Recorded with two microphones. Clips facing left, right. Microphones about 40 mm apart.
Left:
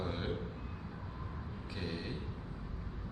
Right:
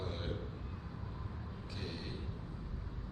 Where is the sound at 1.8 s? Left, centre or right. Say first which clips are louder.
Left 4 dB; centre.